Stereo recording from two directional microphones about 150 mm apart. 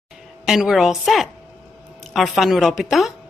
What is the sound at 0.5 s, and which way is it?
A woman's voice, centre (ahead or behind).